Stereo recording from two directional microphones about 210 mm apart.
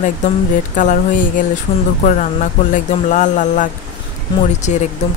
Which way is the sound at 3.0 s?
35° left (ahead or behind).